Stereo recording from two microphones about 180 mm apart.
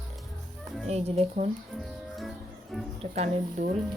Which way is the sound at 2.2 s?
Centre (ahead or behind).